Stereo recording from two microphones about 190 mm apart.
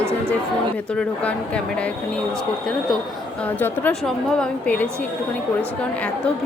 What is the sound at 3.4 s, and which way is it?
A woman's voice, 10° left (ahead or behind).